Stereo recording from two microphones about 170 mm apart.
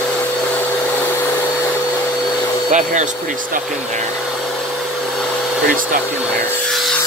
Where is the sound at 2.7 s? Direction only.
45° right (ahead or behind).